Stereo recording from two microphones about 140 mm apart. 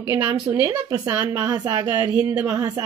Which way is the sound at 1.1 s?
10° right (ahead or behind).